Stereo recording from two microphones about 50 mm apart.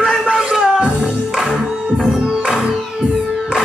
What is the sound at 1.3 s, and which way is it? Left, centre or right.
Music, centre.